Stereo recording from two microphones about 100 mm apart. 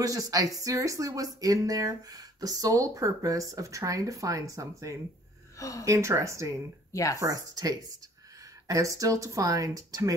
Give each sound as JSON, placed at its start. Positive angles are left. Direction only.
{"t": 0.0, "sound": "speech", "side_deg": -35}
{"t": 5.6, "sound": "speech", "side_deg": 35}
{"t": 5.9, "sound": "speech", "side_deg": -30}
{"t": 6.9, "sound": "speech", "side_deg": 35}
{"t": 7.2, "sound": "speech", "side_deg": -35}